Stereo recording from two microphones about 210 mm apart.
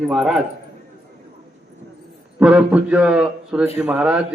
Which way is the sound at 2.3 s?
5° right (ahead or behind).